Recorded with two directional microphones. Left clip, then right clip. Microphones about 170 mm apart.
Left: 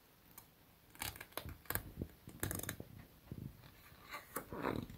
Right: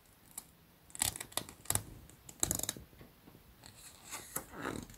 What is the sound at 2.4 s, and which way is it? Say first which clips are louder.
Mechanisms: right 6 dB; 35° right (ahead or behind).